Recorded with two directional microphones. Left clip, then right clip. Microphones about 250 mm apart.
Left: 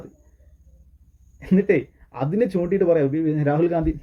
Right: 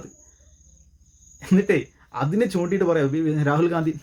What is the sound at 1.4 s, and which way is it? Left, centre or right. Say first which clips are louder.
Speech: left 1 dB; centre.